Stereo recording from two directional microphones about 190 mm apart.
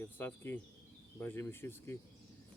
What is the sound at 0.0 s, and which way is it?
Speech, 10° left (ahead or behind).